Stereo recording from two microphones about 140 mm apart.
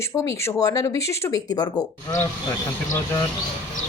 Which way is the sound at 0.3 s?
25° left (ahead or behind).